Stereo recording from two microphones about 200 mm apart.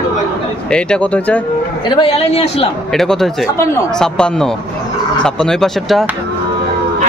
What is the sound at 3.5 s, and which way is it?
Speech, 15° left (ahead or behind).